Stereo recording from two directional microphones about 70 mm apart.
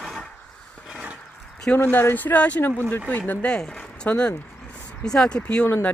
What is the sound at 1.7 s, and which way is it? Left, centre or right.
Speech, left.